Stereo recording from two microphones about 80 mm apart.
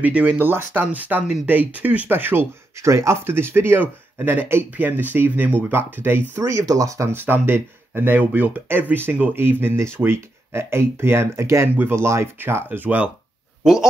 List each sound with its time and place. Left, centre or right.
0.0 s speech: centre
6.3 s speech: right
7.1 s speech: right